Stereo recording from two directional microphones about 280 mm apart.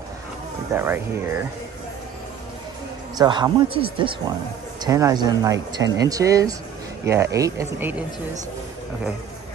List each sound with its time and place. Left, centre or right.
0.7 s speech: centre
3.2 s speech: centre